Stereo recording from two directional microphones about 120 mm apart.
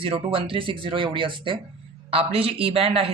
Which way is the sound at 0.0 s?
50° right (ahead or behind).